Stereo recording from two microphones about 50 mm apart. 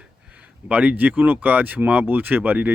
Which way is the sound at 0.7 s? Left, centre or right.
Right.